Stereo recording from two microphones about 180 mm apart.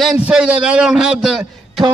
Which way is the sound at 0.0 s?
5° right (ahead or behind).